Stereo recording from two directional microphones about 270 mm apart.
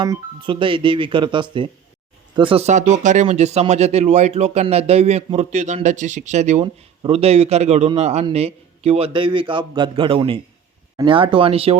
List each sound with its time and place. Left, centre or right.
0.0 s speech: centre